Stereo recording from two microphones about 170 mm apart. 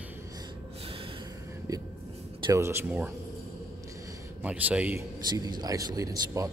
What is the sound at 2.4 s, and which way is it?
Speech, 15° right (ahead or behind).